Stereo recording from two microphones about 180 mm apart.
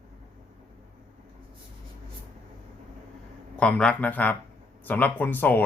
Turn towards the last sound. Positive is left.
turn(degrees=10)  # may be behind; listen again after turning